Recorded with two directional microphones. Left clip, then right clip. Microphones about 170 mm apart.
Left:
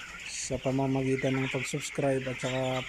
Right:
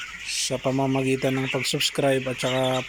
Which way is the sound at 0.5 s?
10° right (ahead or behind).